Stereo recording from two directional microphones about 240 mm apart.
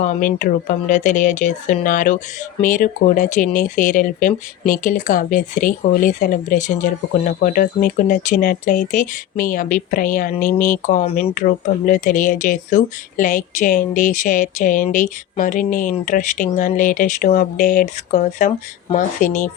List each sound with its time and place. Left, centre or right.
0.0 s speech: left